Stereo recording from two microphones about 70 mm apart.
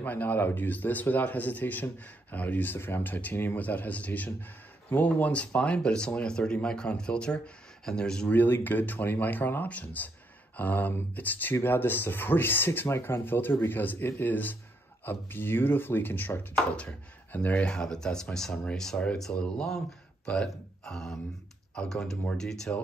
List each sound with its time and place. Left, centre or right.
0.0 s speech: left
8.3 s speech: left; by 22.7 s centre